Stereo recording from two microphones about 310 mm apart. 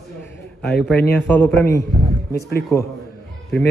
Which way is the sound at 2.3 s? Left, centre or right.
Left.